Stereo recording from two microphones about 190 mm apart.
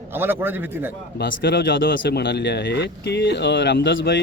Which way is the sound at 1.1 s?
65° left (ahead or behind).